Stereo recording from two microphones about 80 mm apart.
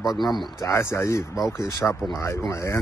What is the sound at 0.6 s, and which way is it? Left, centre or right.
Speech, left.